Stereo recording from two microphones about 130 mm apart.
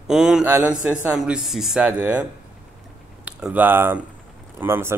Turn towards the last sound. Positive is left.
turn(degrees=-15)  # may be behind; listen again after turning